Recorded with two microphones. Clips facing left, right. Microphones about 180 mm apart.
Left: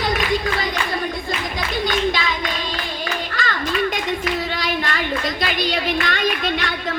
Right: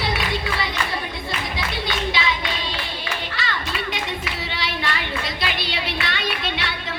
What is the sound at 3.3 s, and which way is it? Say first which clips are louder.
Clapping: left 7 dB; 45° left (ahead or behind).